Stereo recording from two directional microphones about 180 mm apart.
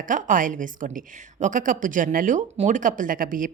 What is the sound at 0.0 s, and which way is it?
A woman's voice, 50° right (ahead or behind).